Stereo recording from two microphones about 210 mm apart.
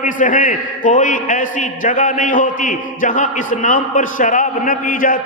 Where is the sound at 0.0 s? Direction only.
40° left (ahead or behind).